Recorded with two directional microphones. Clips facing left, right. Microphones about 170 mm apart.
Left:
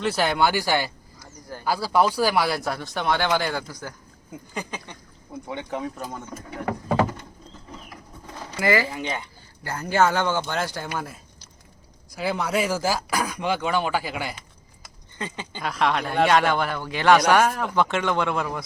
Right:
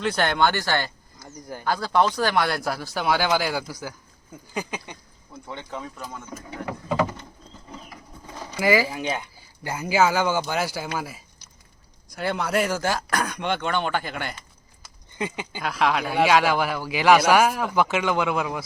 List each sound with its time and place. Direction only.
0.0 s speech: 5° left (ahead or behind)
5.5 s speech: 15° left (ahead or behind)
8.5 s speech: 10° right (ahead or behind); by 14.3 s 5° left (ahead or behind)
15.2 s speech: 15° right (ahead or behind)
15.6 s speech: centre (ahead or behind)